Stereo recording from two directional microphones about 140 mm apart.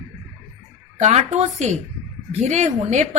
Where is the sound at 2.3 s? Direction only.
55° right (ahead or behind).